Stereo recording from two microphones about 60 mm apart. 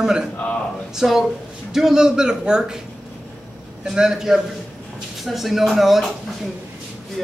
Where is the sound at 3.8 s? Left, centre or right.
Centre.